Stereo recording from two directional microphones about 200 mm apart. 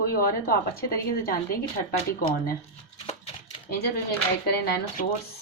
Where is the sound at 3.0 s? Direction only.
30° left (ahead or behind).